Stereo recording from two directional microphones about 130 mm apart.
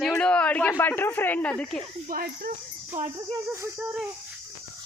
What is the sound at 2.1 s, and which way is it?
Speech, 90° right.